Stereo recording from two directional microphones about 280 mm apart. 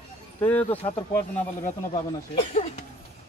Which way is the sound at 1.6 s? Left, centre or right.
Left.